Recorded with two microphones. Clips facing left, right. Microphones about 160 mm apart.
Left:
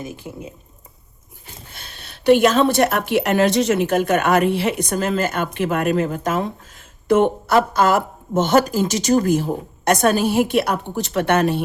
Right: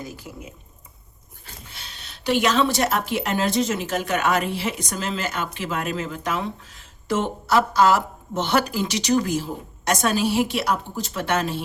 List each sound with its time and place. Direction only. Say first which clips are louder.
0.0 s speech: left 4 dB; 25° left (ahead or behind)
1.7 s speech: left 2 dB; 50° left (ahead or behind)